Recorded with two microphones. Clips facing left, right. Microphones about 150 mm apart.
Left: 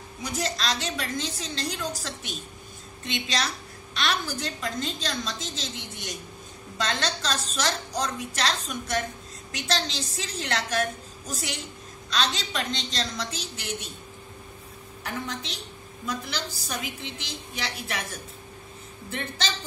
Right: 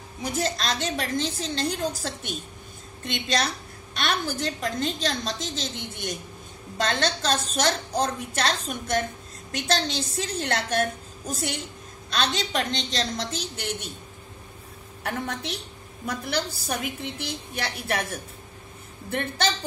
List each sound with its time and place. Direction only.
0.2 s a woman's voice: 55° right (ahead or behind)
15.0 s a woman's voice: 60° right (ahead or behind)